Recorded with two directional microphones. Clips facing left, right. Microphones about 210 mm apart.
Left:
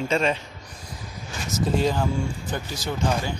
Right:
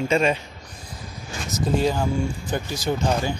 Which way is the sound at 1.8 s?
5° right (ahead or behind).